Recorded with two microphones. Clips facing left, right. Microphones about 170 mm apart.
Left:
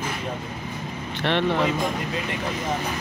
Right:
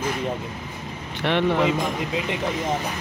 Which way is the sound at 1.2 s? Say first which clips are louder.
Right 2 dB; 10° right (ahead or behind).